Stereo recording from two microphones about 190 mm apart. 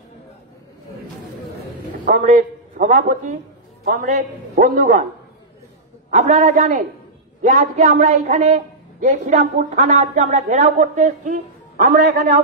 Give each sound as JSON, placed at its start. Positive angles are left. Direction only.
{"t": 2.0, "sound": "a man's voice", "side_deg": -40}
{"t": 6.0, "sound": "a man's voice", "side_deg": -40}